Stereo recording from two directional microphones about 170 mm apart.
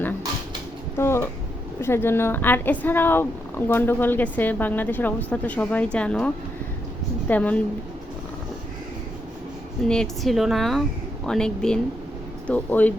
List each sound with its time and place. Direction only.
0.9 s a woman's voice: 15° left (ahead or behind)
9.9 s a woman's voice: centre (ahead or behind)